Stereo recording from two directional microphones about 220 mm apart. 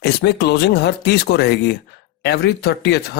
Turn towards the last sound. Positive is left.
turn(degrees=45)  # may be behind; listen again after turning